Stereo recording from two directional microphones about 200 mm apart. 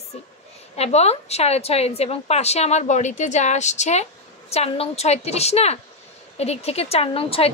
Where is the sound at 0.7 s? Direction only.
30° left (ahead or behind).